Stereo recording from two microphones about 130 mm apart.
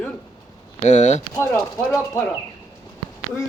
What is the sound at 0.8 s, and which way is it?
Speech, 65° left (ahead or behind).